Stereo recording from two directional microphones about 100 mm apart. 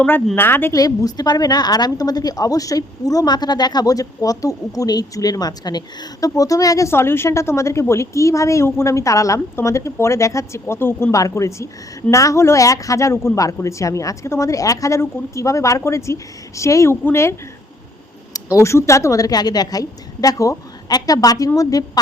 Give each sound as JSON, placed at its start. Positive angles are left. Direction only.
{"t": 0.3, "sound": "a woman's voice", "side_deg": 20}
{"t": 0.7, "sound": "a woman's voice", "side_deg": 40}
{"t": 18.5, "sound": "a woman's voice", "side_deg": 30}